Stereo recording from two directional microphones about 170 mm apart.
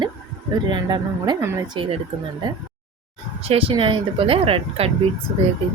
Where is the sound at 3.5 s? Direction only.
35° right (ahead or behind).